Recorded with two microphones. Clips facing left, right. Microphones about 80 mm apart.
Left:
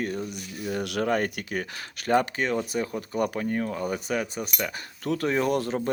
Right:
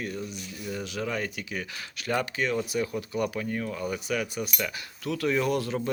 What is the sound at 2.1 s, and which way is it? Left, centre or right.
Speech, left.